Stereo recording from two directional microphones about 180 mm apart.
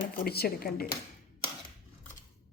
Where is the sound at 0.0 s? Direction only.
60° left (ahead or behind).